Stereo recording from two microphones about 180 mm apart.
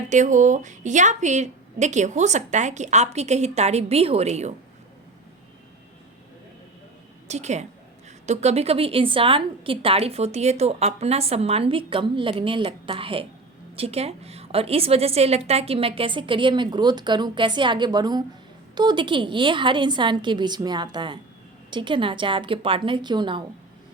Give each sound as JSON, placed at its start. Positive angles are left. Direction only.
{"t": 0.1, "sound": "a woman's voice", "side_deg": -45}
{"t": 7.3, "sound": "a woman's voice", "side_deg": -40}